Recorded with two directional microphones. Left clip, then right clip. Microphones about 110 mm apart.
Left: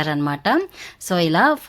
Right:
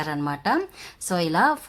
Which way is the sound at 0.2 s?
30° left (ahead or behind).